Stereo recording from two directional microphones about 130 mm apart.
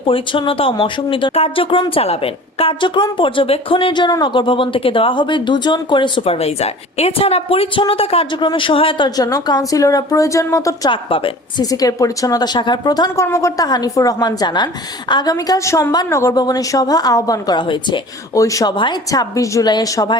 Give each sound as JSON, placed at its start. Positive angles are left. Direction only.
{"t": 0.1, "sound": "a woman's voice", "side_deg": 40}
{"t": 10.8, "sound": "a woman's voice", "side_deg": 40}
{"t": 11.6, "sound": "a woman's voice", "side_deg": 30}
{"t": 18.3, "sound": "a woman's voice", "side_deg": 25}